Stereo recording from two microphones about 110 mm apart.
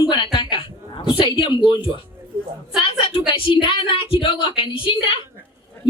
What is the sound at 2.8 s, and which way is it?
A woman's voice, 55° left (ahead or behind).